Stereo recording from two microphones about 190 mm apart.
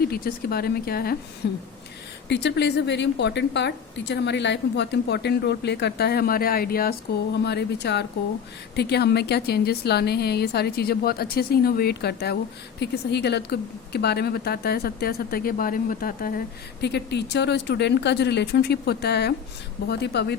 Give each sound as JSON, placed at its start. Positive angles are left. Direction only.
{"t": 0.0, "sound": "speech", "side_deg": 55}
{"t": 2.3, "sound": "a woman's voice", "side_deg": 65}
{"t": 16.8, "sound": "a woman's voice", "side_deg": 60}